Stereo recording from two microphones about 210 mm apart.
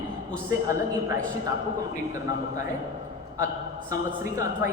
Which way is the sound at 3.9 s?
15° right (ahead or behind).